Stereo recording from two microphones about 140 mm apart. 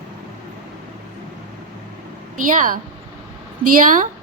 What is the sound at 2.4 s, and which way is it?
A woman's voice, 70° right (ahead or behind).